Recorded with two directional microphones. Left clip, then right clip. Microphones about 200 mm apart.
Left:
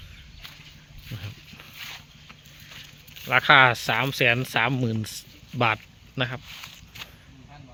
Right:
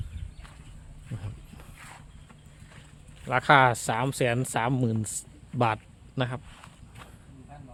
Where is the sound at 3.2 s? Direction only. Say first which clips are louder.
Left 4 dB; 5° right (ahead or behind).